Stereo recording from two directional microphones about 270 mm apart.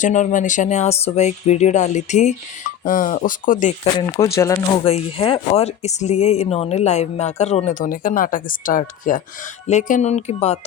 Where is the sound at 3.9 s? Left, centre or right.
Centre.